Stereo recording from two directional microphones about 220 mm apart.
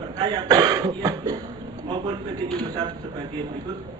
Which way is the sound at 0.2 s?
20° right (ahead or behind).